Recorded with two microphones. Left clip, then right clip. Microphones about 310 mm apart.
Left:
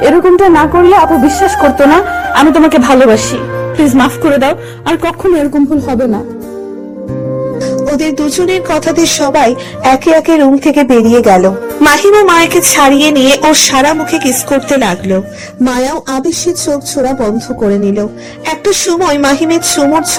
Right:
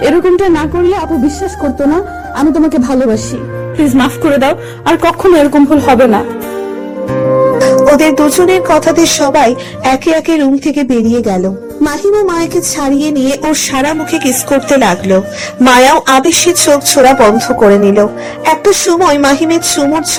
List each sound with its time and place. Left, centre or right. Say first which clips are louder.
0.0 s speech: left 3 dB; centre
3.8 s speech: left 1 dB; centre; by 6.2 s right
7.3 s speech: right 8 dB; right; by 15.2 s centre
15.6 s speech: right 8 dB; right; by 20.1 s centre